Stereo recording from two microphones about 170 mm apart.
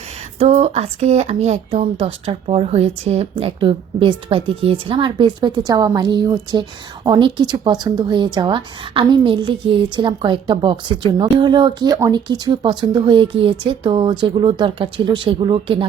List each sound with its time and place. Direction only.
0.3 s speech: 35° right (ahead or behind)